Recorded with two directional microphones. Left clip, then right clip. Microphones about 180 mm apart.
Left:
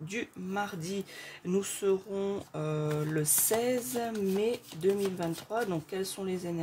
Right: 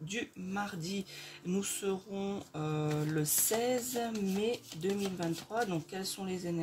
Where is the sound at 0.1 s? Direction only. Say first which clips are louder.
Left 3 dB; 50° left (ahead or behind).